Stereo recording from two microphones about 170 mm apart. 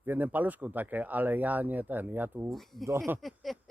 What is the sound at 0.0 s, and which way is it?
Speech, 10° right (ahead or behind).